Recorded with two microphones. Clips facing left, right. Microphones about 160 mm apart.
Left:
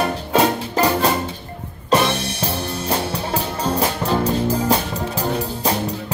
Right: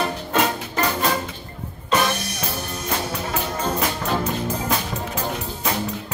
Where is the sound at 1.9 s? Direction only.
30° left (ahead or behind).